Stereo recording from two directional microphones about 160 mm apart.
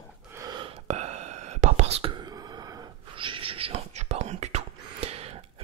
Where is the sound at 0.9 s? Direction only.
45° right (ahead or behind).